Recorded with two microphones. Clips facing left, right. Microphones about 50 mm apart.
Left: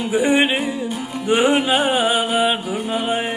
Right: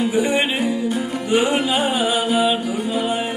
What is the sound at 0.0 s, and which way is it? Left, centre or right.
Music, left.